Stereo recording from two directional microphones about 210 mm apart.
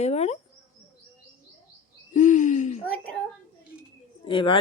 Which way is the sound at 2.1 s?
35° left (ahead or behind).